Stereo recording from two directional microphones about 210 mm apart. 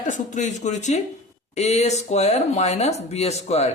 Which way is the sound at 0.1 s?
35° left (ahead or behind).